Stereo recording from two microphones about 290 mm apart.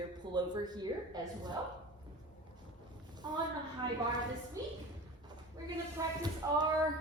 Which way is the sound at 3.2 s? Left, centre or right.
Centre.